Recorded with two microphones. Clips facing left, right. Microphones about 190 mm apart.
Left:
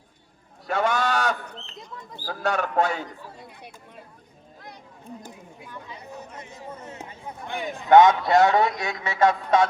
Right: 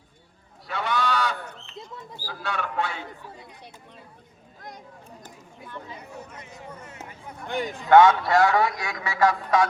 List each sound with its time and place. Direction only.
0.7 s goose: 45° left (ahead or behind)
2.2 s a man's voice: 45° left (ahead or behind)
5.2 s a sound: 10° left (ahead or behind)
7.9 s a man's voice: 20° left (ahead or behind)